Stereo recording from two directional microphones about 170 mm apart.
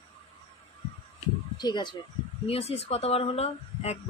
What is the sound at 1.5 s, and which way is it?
Speech, 25° left (ahead or behind).